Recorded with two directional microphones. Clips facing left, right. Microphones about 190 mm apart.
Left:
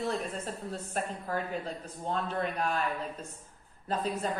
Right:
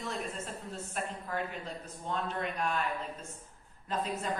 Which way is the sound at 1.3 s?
35° left (ahead or behind).